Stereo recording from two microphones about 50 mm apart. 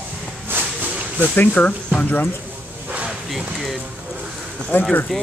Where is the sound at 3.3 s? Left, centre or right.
Centre.